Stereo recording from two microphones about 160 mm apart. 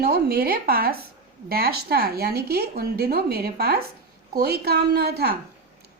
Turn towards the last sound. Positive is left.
turn(degrees=-75)  # may be behind; listen again after turning